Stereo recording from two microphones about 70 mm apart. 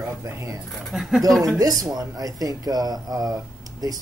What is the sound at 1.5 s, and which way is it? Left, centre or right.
A man's voice, right.